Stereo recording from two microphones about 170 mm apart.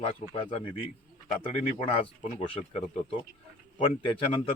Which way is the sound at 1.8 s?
35° left (ahead or behind).